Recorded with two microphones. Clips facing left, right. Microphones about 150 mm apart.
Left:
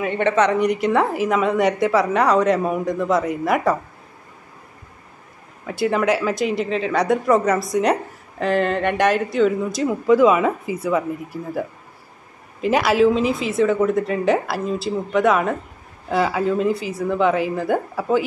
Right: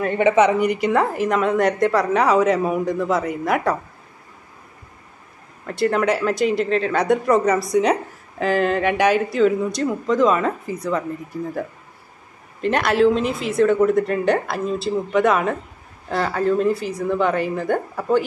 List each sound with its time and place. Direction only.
0.1 s speech: 10° right (ahead or behind)
5.7 s speech: 5° left (ahead or behind)
12.6 s speech: 5° left (ahead or behind)